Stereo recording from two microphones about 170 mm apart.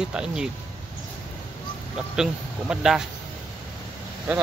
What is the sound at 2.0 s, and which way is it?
Speech, 5° right (ahead or behind).